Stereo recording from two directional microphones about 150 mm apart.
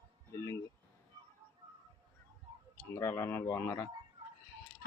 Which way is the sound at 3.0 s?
15° left (ahead or behind).